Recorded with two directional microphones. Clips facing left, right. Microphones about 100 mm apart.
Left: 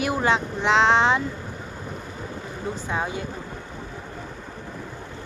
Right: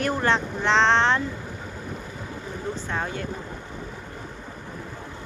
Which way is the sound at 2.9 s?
10° left (ahead or behind).